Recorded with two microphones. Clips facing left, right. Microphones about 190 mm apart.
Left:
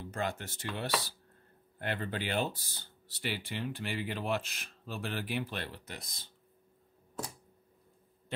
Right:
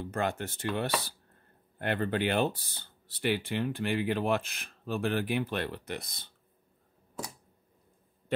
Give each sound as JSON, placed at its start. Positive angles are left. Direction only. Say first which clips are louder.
{"t": 0.0, "sound": "speech", "louder": "right 5 dB", "side_deg": -55}